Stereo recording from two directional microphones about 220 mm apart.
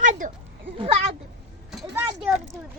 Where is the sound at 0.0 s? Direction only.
35° right (ahead or behind).